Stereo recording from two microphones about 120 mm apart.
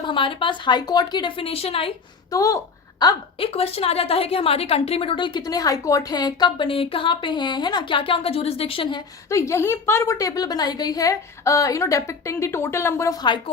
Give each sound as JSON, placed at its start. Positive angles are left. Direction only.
{"t": 0.0, "sound": "a woman's voice", "side_deg": 45}
{"t": 2.3, "sound": "a woman's voice", "side_deg": 25}
{"t": 3.3, "sound": "a woman's voice", "side_deg": 50}
{"t": 9.3, "sound": "a woman's voice", "side_deg": 25}